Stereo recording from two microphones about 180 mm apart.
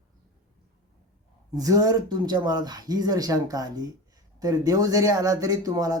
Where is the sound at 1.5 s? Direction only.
20° right (ahead or behind).